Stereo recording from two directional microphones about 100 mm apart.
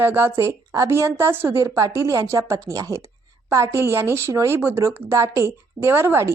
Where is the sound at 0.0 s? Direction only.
20° right (ahead or behind).